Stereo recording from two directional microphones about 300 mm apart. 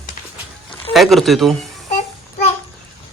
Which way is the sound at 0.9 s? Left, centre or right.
Centre.